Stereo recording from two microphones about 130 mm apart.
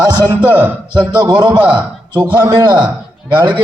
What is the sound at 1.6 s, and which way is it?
Speech, 35° right (ahead or behind).